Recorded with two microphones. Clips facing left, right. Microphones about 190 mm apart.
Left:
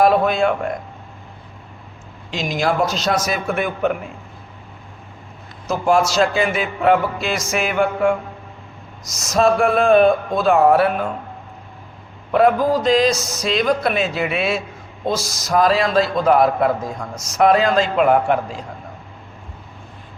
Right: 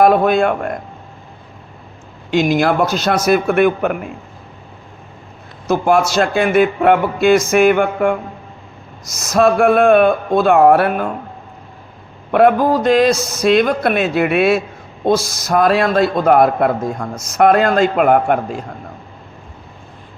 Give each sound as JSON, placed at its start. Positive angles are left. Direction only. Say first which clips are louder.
{"t": 0.0, "sound": "speech", "louder": "right 3 dB", "side_deg": -55}
{"t": 2.3, "sound": "a man's voice", "louder": "right 7 dB", "side_deg": -60}
{"t": 5.6, "sound": "a man's voice", "louder": "right 3 dB", "side_deg": -60}
{"t": 12.3, "sound": "a man's voice", "louder": "right 3 dB", "side_deg": -60}